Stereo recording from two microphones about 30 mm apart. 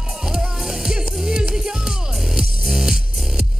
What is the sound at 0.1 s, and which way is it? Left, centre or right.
Music, right.